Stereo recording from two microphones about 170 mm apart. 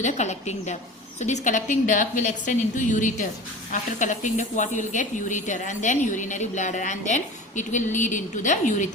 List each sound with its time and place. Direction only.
0.0 s a woman's voice: 45° left (ahead or behind)